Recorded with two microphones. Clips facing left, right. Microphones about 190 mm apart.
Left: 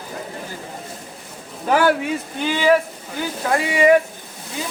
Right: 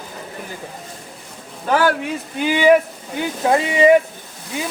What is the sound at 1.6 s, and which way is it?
Speech, 5° left (ahead or behind).